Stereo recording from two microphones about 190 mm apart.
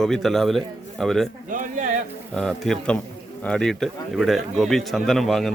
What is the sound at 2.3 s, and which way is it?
Speech, centre (ahead or behind).